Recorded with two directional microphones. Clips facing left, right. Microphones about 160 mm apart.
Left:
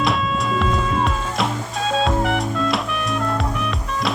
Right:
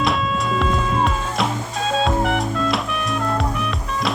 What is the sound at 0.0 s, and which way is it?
Music, centre (ahead or behind).